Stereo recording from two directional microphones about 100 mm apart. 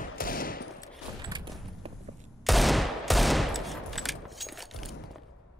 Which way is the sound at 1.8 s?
75° right (ahead or behind).